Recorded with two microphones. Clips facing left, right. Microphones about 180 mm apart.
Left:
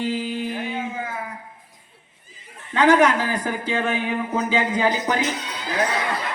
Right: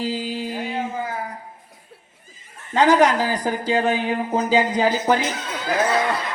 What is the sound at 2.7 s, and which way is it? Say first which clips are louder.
Speech: right 1 dB; 35° right (ahead or behind).